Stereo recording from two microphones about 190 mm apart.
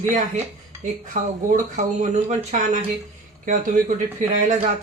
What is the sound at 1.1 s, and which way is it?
Speech, 45° right (ahead or behind).